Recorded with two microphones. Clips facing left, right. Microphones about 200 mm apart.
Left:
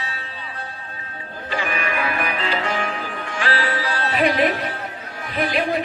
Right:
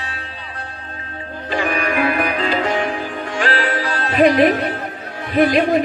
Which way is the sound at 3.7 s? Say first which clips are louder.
Right 3 dB; 50° right (ahead or behind).